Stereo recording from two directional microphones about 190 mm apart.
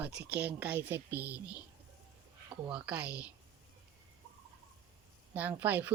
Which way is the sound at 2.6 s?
5° right (ahead or behind).